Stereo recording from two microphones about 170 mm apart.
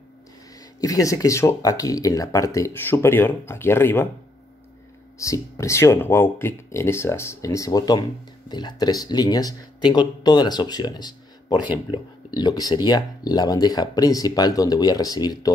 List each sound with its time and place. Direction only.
0.7 s speech: 20° left (ahead or behind)
5.2 s speech: 20° left (ahead or behind)